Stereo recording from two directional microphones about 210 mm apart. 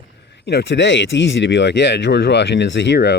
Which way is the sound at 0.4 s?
55° left (ahead or behind).